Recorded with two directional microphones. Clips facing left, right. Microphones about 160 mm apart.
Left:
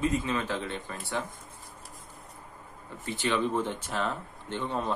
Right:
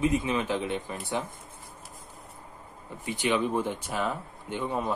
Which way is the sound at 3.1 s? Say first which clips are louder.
Right 2 dB; 15° right (ahead or behind).